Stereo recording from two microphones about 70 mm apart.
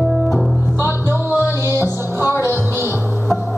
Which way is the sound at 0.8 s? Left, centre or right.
Right.